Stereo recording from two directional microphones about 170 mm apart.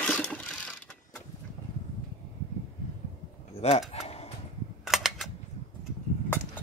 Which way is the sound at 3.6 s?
40° left (ahead or behind).